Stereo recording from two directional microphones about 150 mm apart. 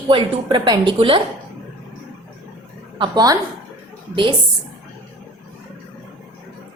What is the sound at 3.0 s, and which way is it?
A woman's voice, 25° right (ahead or behind).